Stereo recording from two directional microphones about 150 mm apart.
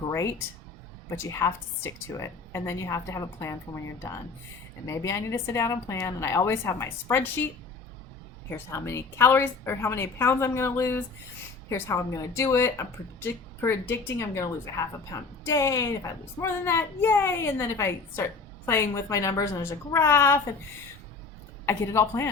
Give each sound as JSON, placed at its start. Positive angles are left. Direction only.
{"t": 0.0, "sound": "a woman's voice", "side_deg": 20}
{"t": 4.9, "sound": "a woman's voice", "side_deg": 20}
{"t": 8.4, "sound": "a woman's voice", "side_deg": 15}
{"t": 21.7, "sound": "a woman's voice", "side_deg": 20}